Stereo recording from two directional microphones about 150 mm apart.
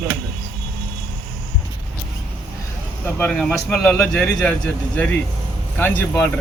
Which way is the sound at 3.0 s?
10° left (ahead or behind).